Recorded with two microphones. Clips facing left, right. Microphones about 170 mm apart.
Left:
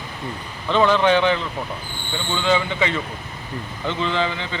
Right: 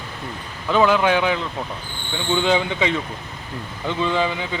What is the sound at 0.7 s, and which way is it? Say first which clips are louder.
Speech: even; 10° right (ahead or behind).